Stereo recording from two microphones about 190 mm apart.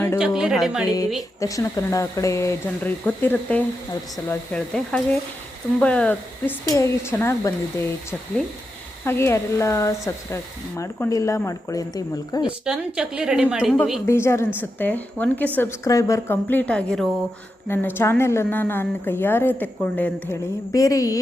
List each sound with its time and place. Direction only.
0.2 s a woman's voice: 5° right (ahead or behind)
1.4 s a woman's voice: 15° left (ahead or behind)
9.0 s a woman's voice: 15° left (ahead or behind)
12.4 s a woman's voice: 5° right (ahead or behind)
14.1 s a woman's voice: 15° left (ahead or behind)